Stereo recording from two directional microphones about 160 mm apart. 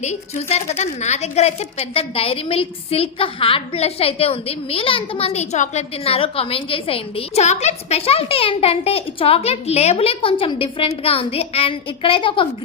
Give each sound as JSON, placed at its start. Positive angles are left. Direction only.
{"t": 0.4, "sound": "a woman's voice", "side_deg": 40}